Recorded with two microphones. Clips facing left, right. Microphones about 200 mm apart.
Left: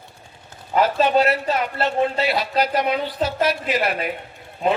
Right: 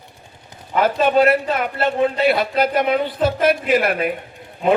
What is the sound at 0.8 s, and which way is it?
A man's voice, 55° right (ahead or behind).